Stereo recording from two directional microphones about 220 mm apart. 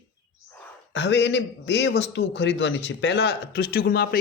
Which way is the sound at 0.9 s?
50° left (ahead or behind).